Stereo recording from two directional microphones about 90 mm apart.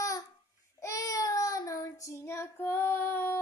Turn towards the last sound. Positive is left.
turn(degrees=25)  # may be behind; listen again after turning